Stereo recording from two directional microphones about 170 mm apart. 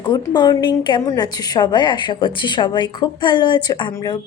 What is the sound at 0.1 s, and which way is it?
A woman's voice, 25° left (ahead or behind).